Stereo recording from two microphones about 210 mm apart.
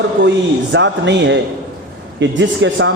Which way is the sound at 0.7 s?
60° right (ahead or behind).